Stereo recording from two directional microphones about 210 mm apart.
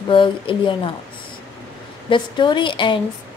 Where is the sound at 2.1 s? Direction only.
20° left (ahead or behind).